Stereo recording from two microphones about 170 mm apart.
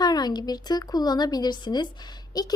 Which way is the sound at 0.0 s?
25° left (ahead or behind).